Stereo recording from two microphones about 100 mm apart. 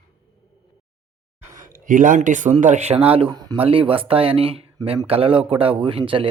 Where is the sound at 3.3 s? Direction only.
40° right (ahead or behind).